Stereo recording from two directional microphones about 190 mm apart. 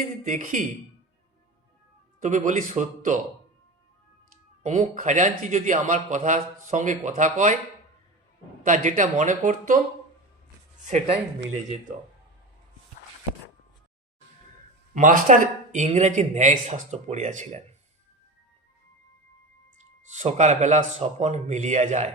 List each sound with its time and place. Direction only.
0.0 s a man's voice: 45° right (ahead or behind)
2.2 s a man's voice: 40° right (ahead or behind)
4.6 s a man's voice: 40° right (ahead or behind)
8.6 s a man's voice: 40° right (ahead or behind)
14.9 s a man's voice: 45° right (ahead or behind)
20.1 s a man's voice: 40° right (ahead or behind)